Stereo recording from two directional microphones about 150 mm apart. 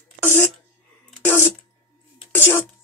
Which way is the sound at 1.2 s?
15° left (ahead or behind).